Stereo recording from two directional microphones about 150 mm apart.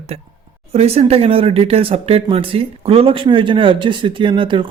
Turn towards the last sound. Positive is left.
turn(degrees=-35)  # may be behind; listen again after turning